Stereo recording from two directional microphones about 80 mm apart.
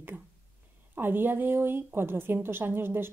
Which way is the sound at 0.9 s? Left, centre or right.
Right.